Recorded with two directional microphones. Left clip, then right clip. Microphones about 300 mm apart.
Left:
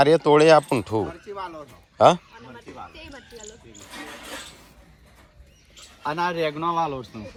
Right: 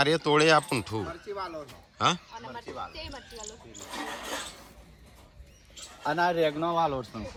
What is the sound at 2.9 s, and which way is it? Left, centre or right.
Speech, right.